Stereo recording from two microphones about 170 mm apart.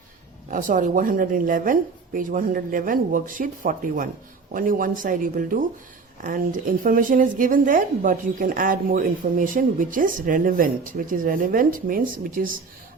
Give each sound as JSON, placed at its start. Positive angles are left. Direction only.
{"t": 0.5, "sound": "speech", "side_deg": -50}